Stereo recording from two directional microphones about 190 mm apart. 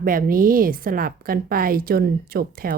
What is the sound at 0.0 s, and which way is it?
A woman's voice, 50° right (ahead or behind).